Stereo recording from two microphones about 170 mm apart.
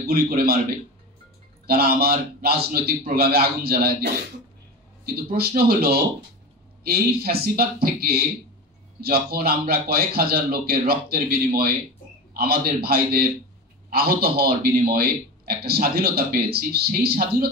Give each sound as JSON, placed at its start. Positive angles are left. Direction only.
{"t": 0.0, "sound": "a man's voice", "side_deg": -60}
{"t": 1.7, "sound": "a man's voice", "side_deg": -65}